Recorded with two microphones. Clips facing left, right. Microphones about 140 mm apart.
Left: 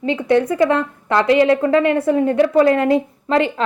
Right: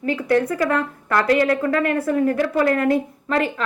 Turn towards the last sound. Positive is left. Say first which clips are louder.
# left 4 dB
turn(degrees=25)  # may be behind; listen again after turning